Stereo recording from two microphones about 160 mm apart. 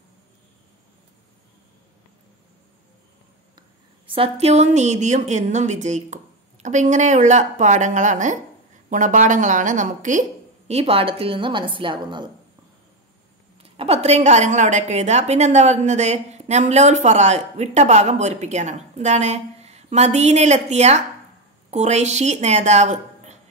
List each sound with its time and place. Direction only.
4.1 s a woman's voice: 40° right (ahead or behind)
10.7 s a woman's voice: 40° right (ahead or behind)
13.6 s a woman's voice: 40° right (ahead or behind)